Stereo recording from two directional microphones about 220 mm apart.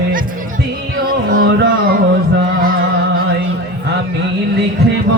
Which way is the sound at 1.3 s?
40° right (ahead or behind).